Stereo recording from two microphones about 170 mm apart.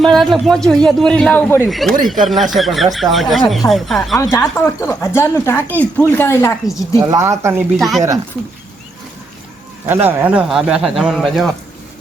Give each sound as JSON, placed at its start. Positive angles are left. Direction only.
{"t": 0.0, "sound": "a man's voice", "side_deg": 0}
{"t": 1.6, "sound": "a man's voice", "side_deg": 0}
{"t": 4.2, "sound": "speech", "side_deg": 15}
{"t": 7.1, "sound": "speech", "side_deg": -15}
{"t": 7.8, "sound": "a man's voice", "side_deg": 0}
{"t": 9.8, "sound": "a man's voice", "side_deg": -10}